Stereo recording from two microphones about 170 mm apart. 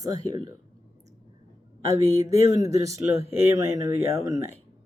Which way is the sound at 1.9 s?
20° right (ahead or behind).